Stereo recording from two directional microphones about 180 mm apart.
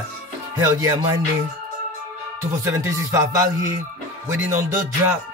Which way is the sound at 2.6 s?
15° right (ahead or behind).